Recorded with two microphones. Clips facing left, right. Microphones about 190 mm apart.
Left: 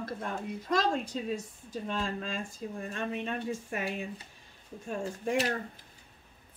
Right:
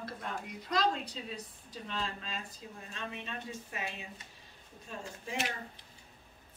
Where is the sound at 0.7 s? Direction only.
45° left (ahead or behind).